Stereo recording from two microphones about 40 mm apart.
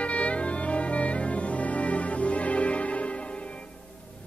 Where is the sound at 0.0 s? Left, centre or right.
Left.